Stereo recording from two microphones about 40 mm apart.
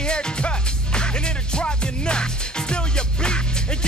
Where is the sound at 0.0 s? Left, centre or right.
Left.